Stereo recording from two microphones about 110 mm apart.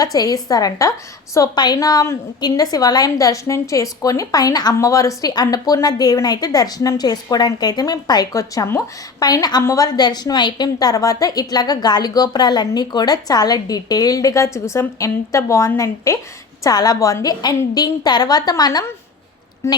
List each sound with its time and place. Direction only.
0.0 s a woman's voice: 35° left (ahead or behind)